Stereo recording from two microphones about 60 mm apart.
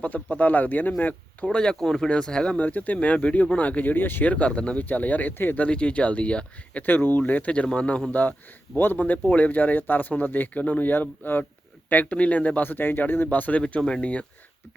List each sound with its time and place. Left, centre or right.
0.0 s speech: left
1.5 s speech: centre
2.6 s speech: left
5.6 s speech: centre
6.8 s speech: left
8.2 s speech: left